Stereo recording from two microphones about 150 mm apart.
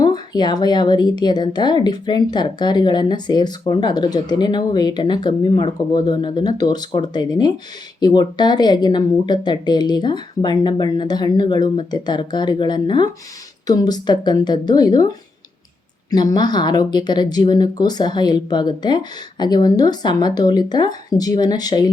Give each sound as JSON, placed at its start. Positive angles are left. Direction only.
{"t": 0.0, "sound": "speech", "side_deg": 30}